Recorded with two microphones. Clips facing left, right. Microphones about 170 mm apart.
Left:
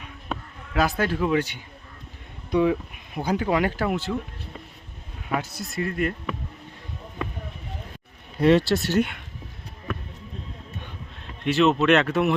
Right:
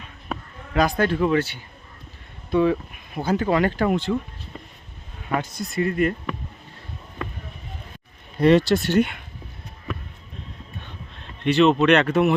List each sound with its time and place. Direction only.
0.3 s bleat: 5° left (ahead or behind)
2.5 s speech: 15° left (ahead or behind)
5.3 s speech: 5° left (ahead or behind)
8.4 s speech: 5° left (ahead or behind)
11.4 s speech: centre (ahead or behind)